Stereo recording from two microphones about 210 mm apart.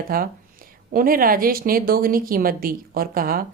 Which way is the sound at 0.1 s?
45° right (ahead or behind).